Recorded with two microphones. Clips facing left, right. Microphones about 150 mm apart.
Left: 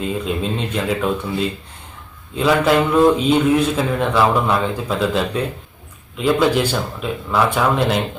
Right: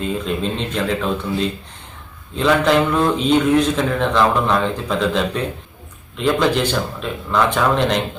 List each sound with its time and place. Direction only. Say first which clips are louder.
0.0 s a man's voice: even; 5° left (ahead or behind)